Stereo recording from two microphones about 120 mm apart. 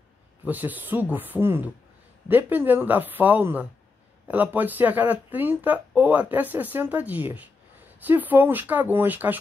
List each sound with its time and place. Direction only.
0.5 s speech: 15° right (ahead or behind)